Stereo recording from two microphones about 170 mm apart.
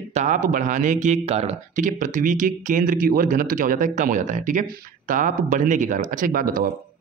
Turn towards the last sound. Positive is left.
turn(degrees=-55)  # may be behind; listen again after turning